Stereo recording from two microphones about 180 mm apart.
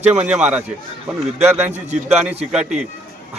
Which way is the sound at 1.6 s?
40° right (ahead or behind).